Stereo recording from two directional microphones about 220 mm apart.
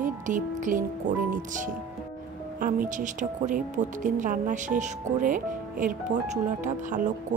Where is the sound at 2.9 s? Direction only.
35° right (ahead or behind).